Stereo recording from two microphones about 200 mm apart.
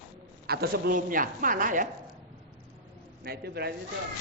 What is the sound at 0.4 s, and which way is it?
Speech, 50° right (ahead or behind).